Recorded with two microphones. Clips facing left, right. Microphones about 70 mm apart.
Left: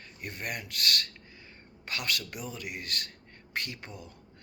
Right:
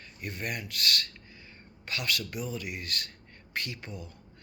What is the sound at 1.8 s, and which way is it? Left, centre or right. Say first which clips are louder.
A man's voice: right 1 dB; left.